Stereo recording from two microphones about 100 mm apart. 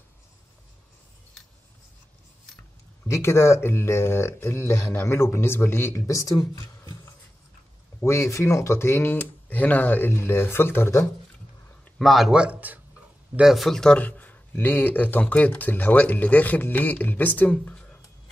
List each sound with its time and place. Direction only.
3.1 s speech: 25° left (ahead or behind)
8.0 s speech: 25° left (ahead or behind)
12.0 s speech: centre (ahead or behind); by 12.8 s 15° right (ahead or behind)
13.4 s speech: centre (ahead or behind)
13.9 s speech: 15° left (ahead or behind)